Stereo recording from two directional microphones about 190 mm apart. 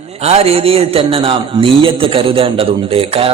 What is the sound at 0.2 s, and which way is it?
A man's voice, 35° right (ahead or behind).